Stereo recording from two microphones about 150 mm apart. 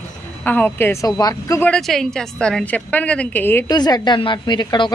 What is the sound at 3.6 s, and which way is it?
A woman's voice, 25° left (ahead or behind).